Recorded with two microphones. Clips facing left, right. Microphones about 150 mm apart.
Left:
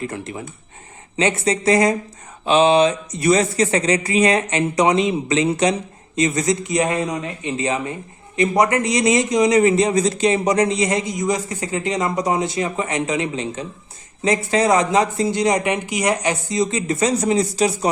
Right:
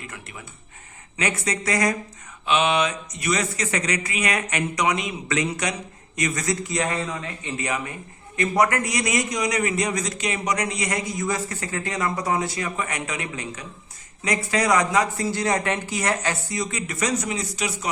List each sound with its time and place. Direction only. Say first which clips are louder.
0.0 s a man's voice: left 12 dB; 30° left (ahead or behind)